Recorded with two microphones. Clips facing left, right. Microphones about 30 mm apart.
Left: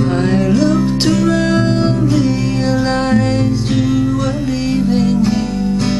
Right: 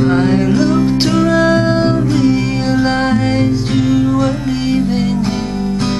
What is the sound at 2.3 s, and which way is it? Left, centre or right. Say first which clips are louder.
Music: right 2 dB; centre.